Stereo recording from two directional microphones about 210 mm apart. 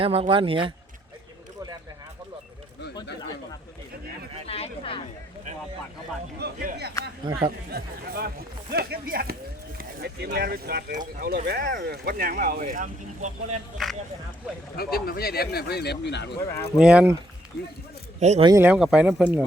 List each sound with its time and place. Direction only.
0.0 s speech: 25° right (ahead or behind)
4.4 s a sound: 30° left (ahead or behind)
6.4 s speech: 50° right (ahead or behind)
7.2 s speech: 20° right (ahead or behind)
7.7 s speech: 45° right (ahead or behind)
14.8 s speech: 45° left (ahead or behind)
16.7 s speech: 5° right (ahead or behind)
18.2 s speech: 30° right (ahead or behind)
18.4 s speech: 10° right (ahead or behind)